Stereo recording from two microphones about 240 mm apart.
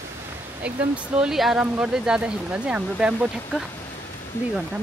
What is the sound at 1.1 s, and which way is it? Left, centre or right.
Speech, centre.